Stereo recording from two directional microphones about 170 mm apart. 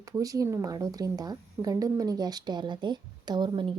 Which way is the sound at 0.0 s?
20° right (ahead or behind).